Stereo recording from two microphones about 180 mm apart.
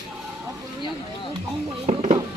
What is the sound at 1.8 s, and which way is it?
Music, 35° right (ahead or behind).